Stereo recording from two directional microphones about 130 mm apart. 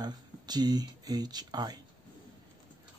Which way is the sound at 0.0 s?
30° right (ahead or behind).